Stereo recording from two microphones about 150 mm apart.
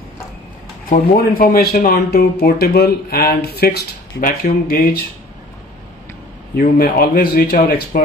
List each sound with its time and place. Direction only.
0.8 s speech: 75° left (ahead or behind)
6.5 s speech: 80° left